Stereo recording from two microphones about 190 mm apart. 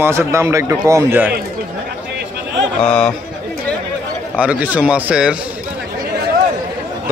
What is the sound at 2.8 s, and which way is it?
Speech, 5° left (ahead or behind).